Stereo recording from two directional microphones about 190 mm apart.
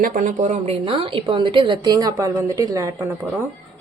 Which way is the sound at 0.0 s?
45° right (ahead or behind).